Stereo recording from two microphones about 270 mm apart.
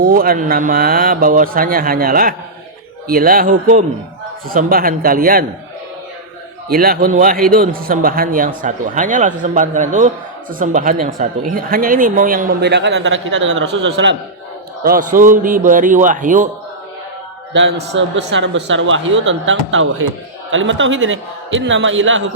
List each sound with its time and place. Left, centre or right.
0.0 s speech: right
6.7 s speech: right
14.8 s a man's voice: right
17.5 s a man's voice: right